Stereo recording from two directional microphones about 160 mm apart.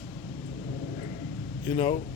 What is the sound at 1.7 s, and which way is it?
Speech, 35° left (ahead or behind).